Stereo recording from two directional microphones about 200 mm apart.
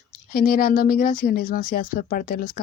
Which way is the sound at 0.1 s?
45° left (ahead or behind).